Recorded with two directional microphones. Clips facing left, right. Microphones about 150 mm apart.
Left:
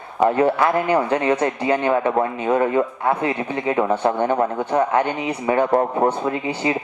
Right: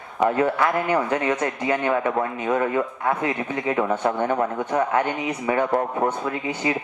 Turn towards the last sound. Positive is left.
turn(degrees=30)  # may be behind; listen again after turning